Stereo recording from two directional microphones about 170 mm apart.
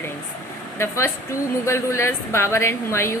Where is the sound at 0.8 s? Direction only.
15° left (ahead or behind).